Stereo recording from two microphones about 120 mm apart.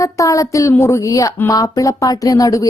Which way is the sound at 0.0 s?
25° left (ahead or behind).